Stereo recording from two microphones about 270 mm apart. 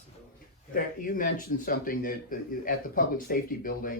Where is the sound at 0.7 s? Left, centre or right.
Left.